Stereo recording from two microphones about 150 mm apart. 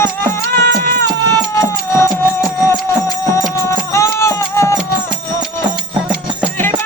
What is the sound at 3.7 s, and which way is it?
Music, 20° left (ahead or behind).